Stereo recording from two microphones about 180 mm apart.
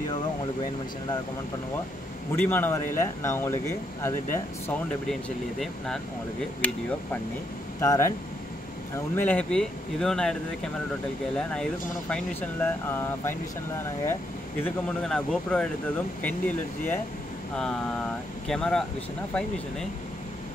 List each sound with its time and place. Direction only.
2.3 s speech: 10° left (ahead or behind)
5.0 s speech: centre (ahead or behind)
7.8 s speech: 20° left (ahead or behind)
14.6 s speech: 5° left (ahead or behind)